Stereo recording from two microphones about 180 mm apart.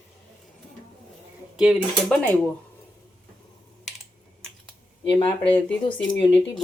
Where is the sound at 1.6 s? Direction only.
Centre (ahead or behind).